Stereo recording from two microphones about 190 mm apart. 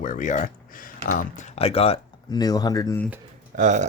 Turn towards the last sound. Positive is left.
turn(degrees=-40)  # may be behind; listen again after turning